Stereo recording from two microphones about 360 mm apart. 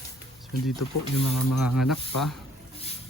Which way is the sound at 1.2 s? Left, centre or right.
Left.